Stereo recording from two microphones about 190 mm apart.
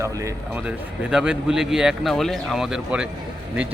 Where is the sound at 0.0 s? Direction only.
15° right (ahead or behind).